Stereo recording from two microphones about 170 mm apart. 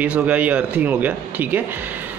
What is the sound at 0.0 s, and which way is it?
Speech, 10° right (ahead or behind).